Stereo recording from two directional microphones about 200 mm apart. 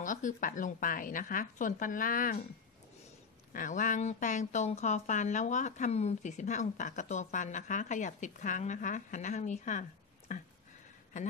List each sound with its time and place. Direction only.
0.0 s speech: 40° left (ahead or behind)
3.5 s speech: 40° left (ahead or behind)